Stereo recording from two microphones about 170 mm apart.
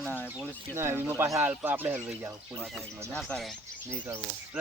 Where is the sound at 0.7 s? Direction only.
15° right (ahead or behind).